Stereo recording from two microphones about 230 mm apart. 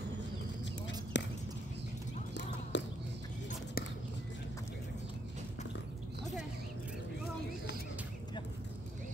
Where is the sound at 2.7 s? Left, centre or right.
Left.